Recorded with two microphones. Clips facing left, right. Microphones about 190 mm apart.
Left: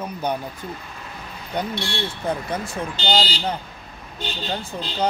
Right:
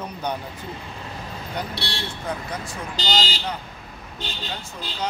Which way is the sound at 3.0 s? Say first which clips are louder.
Left 3 dB; 45° right (ahead or behind).